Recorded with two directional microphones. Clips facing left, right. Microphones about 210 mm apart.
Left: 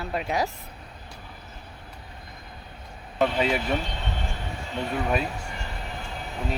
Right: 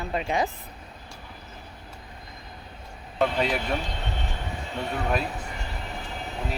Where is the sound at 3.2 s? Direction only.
5° left (ahead or behind).